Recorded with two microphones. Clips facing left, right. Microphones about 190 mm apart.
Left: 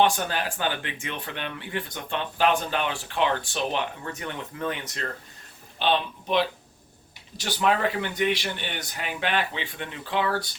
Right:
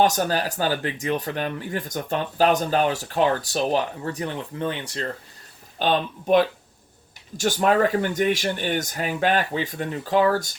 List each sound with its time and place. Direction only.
0.0 s speech: 40° right (ahead or behind)
5.8 s speech: 45° right (ahead or behind)